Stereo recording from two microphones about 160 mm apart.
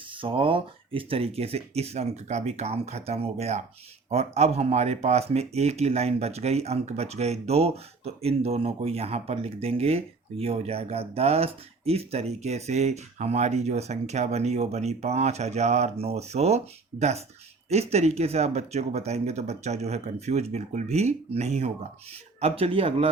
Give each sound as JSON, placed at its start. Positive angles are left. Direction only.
{"t": 0.1, "sound": "speech", "side_deg": -35}